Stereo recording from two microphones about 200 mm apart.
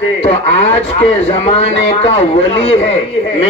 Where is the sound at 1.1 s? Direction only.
30° left (ahead or behind).